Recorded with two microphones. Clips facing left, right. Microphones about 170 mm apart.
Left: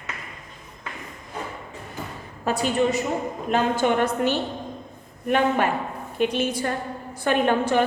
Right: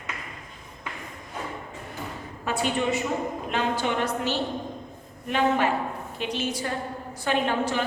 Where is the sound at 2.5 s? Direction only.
40° left (ahead or behind).